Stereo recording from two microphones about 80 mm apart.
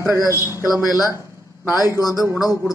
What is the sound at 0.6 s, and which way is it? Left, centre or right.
A man's voice, left.